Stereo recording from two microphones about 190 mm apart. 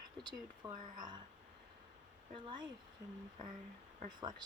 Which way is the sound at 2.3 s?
25° right (ahead or behind).